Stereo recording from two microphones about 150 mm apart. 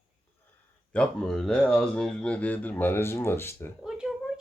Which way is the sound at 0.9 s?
5° left (ahead or behind).